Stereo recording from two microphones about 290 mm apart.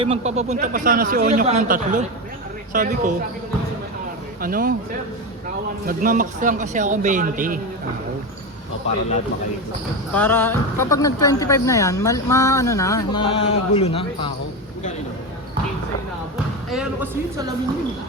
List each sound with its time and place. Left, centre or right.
0.0 s speech: right
4.4 s speech: right
5.8 s speech: right
10.2 s speech: centre
16.6 s speech: centre